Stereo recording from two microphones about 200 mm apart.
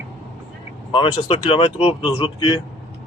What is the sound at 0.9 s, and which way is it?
Speech, 25° left (ahead or behind).